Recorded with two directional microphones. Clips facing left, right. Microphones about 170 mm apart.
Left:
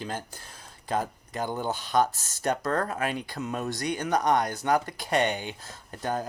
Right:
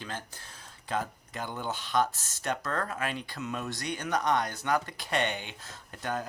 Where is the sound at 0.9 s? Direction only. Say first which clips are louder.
Left 4 dB; 40° left (ahead or behind).